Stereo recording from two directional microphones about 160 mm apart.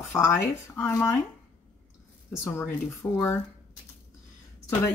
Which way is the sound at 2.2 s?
10° left (ahead or behind).